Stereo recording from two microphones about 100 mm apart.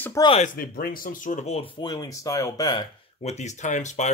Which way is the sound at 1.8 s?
40° left (ahead or behind).